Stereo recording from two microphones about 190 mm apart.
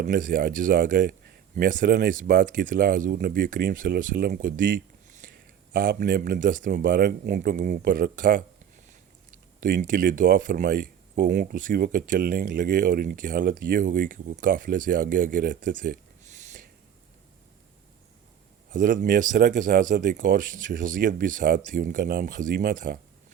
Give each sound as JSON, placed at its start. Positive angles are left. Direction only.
{"t": 0.0, "sound": "speech", "side_deg": -45}
{"t": 9.6, "sound": "speech", "side_deg": -45}
{"t": 18.7, "sound": "speech", "side_deg": -45}